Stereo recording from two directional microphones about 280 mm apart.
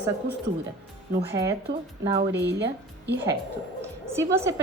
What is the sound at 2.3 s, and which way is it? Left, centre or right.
Speech, right.